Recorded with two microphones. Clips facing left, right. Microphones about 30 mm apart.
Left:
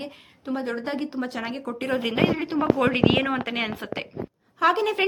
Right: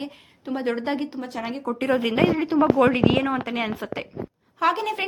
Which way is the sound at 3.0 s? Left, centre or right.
Left.